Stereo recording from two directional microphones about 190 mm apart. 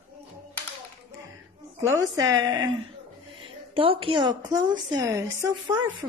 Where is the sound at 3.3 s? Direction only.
30° right (ahead or behind).